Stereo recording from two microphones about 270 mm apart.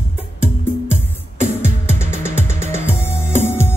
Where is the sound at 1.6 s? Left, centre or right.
Centre.